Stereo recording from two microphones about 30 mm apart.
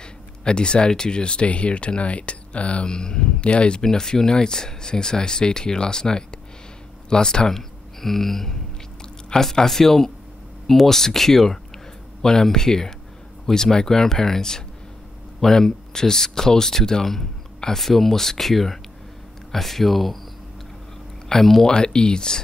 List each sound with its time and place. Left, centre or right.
0.4 s speech: left
2.9 s speech: left
3.8 s speech: left
7.5 s speech: centre
17.7 s speech: centre
21.4 s speech: centre
21.6 s speech: left